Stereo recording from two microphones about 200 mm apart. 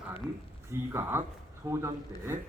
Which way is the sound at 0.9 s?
10° right (ahead or behind).